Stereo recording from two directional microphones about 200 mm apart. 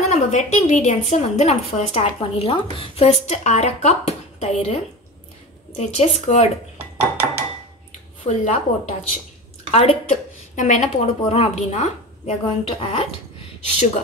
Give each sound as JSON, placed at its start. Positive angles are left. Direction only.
{"t": 0.1, "sound": "a woman's voice", "side_deg": 35}
{"t": 5.8, "sound": "a woman's voice", "side_deg": 35}
{"t": 7.0, "sound": "dishes", "side_deg": -10}
{"t": 8.3, "sound": "a woman's voice", "side_deg": 35}